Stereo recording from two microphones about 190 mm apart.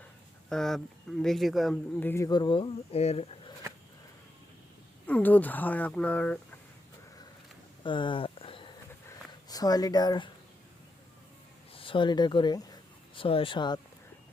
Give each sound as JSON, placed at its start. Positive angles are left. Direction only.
{"t": 0.5, "sound": "speech", "side_deg": 0}
{"t": 5.0, "sound": "speech", "side_deg": 10}
{"t": 7.9, "sound": "a sound", "side_deg": 25}
{"t": 11.7, "sound": "speech", "side_deg": 30}